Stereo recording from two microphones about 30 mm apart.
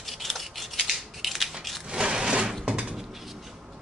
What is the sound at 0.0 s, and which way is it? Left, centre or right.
Scissors, centre.